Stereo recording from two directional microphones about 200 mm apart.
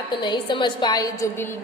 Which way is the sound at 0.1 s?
20° left (ahead or behind).